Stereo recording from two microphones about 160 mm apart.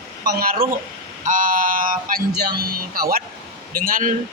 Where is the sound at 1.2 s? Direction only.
55° right (ahead or behind).